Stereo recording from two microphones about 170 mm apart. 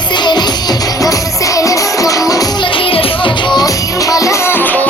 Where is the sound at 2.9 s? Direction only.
30° left (ahead or behind).